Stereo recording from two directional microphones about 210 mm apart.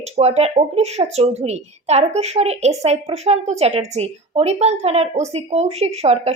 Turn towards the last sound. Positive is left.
turn(degrees=-30)  # may be behind; listen again after turning